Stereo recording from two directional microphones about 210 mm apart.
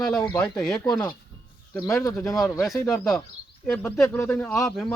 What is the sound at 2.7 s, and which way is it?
Speech, 15° left (ahead or behind).